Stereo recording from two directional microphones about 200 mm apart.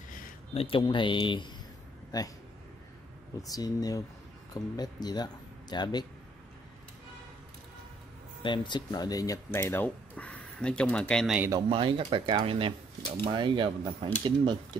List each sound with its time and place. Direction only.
0.6 s speech: 25° left (ahead or behind)
3.4 s speech: 20° left (ahead or behind)
8.4 s speech: 25° left (ahead or behind); by 11.5 s 5° right (ahead or behind)
11.5 s speech: 25° right (ahead or behind)